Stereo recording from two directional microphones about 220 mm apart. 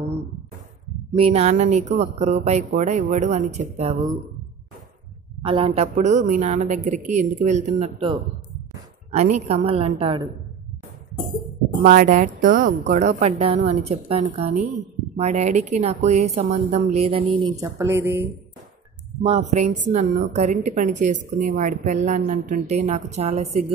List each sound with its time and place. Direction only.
1.1 s a woman's voice: 25° right (ahead or behind)
5.4 s a woman's voice: 25° right (ahead or behind)
11.8 s a woman's voice: 35° right (ahead or behind); by 18.3 s 10° right (ahead or behind)
19.2 s a woman's voice: 30° right (ahead or behind)